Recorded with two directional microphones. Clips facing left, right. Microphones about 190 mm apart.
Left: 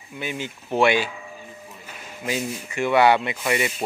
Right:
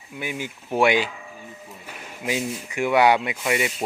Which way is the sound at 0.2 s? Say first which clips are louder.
Even; 10° right (ahead or behind).